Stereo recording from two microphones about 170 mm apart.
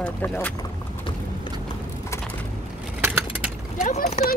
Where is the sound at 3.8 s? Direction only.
45° left (ahead or behind).